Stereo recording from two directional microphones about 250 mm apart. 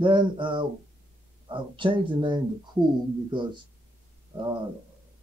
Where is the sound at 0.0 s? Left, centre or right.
Centre.